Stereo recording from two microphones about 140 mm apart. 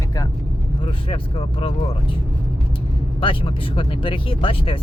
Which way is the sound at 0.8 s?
40° left (ahead or behind).